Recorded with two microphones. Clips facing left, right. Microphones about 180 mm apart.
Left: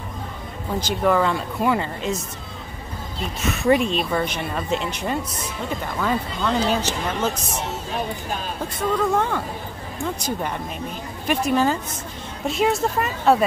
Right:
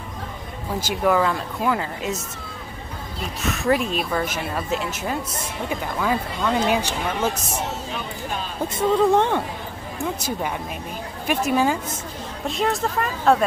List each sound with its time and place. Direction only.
0.7 s speech: 5° right (ahead or behind)
3.4 s speech: centre (ahead or behind)
8.7 s speech: 25° right (ahead or behind)
11.2 s speech: 10° right (ahead or behind)
12.4 s speech: centre (ahead or behind)